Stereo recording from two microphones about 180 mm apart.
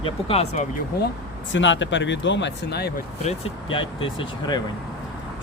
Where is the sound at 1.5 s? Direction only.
90° left; by 2.9 s 65° left (ahead or behind).